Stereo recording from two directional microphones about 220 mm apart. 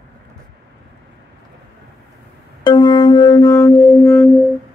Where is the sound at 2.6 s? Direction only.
20° left (ahead or behind).